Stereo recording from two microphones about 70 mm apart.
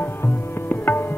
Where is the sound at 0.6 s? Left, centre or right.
Left.